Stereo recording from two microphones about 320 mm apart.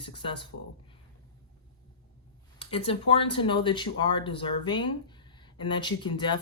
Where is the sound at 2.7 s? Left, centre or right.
Centre.